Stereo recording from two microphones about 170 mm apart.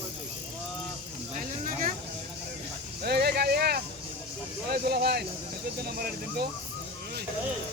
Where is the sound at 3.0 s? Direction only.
70° right (ahead or behind).